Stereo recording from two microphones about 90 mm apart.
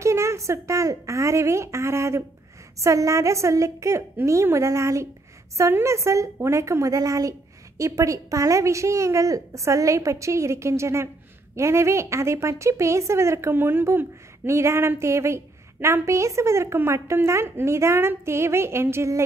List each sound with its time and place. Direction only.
0.0 s a woman's voice: 30° right (ahead or behind)